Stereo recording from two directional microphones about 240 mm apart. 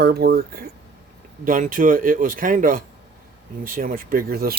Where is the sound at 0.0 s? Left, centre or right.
Right.